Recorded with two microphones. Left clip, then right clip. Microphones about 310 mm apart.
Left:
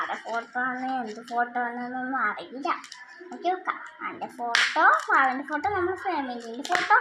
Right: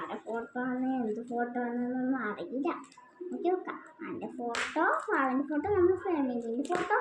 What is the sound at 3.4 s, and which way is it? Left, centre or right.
Speech, centre.